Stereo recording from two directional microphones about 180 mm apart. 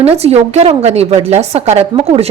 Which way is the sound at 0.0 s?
35° right (ahead or behind).